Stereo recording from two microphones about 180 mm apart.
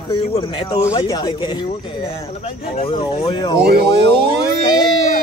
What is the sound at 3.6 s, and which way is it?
Speech, 60° right (ahead or behind).